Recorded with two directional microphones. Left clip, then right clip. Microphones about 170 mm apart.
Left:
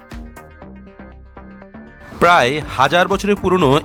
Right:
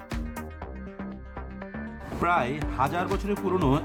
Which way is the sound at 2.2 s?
55° left (ahead or behind).